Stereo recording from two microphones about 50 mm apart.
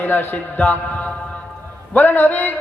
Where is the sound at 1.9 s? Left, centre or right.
Left.